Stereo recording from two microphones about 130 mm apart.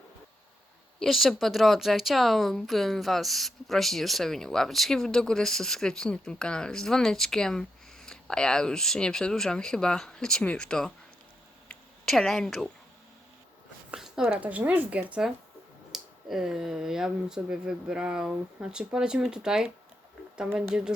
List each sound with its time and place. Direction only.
0.9 s speech: centre (ahead or behind)
13.9 s a sound: 5° right (ahead or behind)
14.3 s speech: 15° right (ahead or behind)